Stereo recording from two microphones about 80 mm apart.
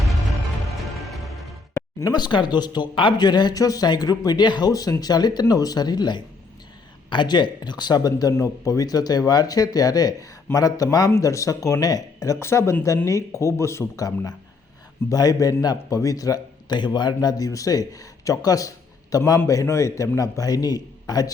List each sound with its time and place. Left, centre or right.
0.7 s music: centre
2.0 s speech: left
7.1 s speech: left
15.1 s speech: left